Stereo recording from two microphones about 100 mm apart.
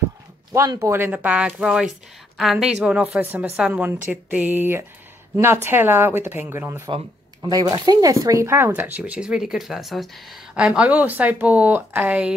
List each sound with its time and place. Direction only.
0.5 s speech: 40° right (ahead or behind)
0.7 s speech: 25° right (ahead or behind)
7.4 s speech: 40° right (ahead or behind); by 10.4 s centre (ahead or behind)
10.5 s speech: 10° right (ahead or behind)